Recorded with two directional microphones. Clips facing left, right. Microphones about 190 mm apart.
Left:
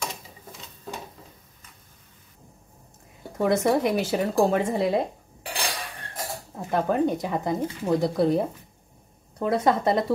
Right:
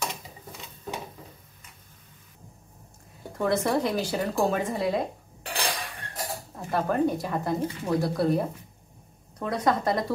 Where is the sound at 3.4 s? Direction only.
15° left (ahead or behind).